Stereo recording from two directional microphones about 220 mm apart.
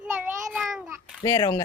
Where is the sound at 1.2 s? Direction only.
15° left (ahead or behind).